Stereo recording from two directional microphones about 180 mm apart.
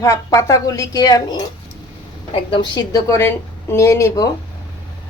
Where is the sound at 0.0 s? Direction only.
15° left (ahead or behind).